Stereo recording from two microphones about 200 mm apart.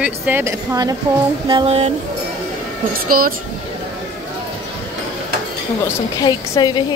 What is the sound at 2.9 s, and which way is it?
Speech, 45° right (ahead or behind).